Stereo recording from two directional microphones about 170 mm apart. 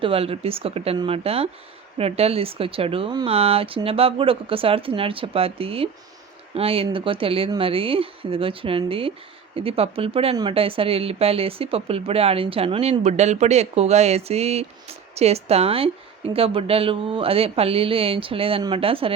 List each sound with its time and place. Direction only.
0.0 s speech: 35° right (ahead or behind)